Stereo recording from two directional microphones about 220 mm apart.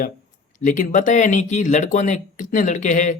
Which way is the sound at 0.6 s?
35° left (ahead or behind).